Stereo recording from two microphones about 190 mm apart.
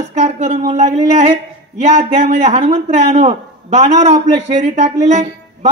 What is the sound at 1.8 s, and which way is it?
Speech, 35° right (ahead or behind).